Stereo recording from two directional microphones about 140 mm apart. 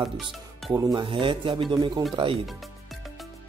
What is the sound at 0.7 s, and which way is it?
Music, 25° right (ahead or behind).